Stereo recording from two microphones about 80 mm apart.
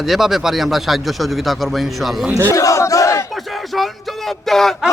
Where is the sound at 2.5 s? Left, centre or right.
Left.